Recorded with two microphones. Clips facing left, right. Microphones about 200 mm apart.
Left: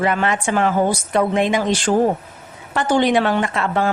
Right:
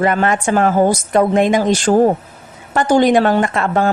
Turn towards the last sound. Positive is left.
turn(degrees=-45)  # may be behind; listen again after turning